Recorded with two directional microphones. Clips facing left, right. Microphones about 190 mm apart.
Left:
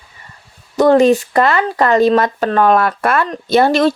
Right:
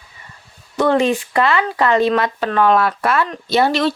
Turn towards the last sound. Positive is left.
turn(degrees=45)  # may be behind; listen again after turning